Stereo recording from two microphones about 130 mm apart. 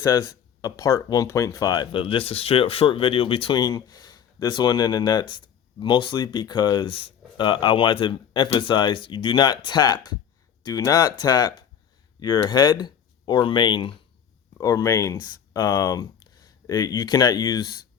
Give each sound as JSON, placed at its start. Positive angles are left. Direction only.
{"t": 0.0, "sound": "speech", "side_deg": 25}